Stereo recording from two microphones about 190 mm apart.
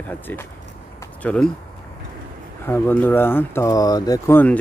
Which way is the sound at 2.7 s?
10° left (ahead or behind).